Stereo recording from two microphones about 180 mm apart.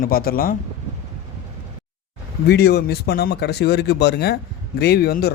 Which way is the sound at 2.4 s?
60° left (ahead or behind).